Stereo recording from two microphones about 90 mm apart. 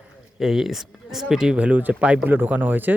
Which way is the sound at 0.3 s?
5° right (ahead or behind).